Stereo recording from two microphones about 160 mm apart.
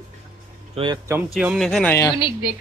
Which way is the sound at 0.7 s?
30° right (ahead or behind).